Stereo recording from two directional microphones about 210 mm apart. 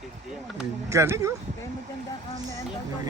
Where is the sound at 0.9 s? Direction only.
15° right (ahead or behind).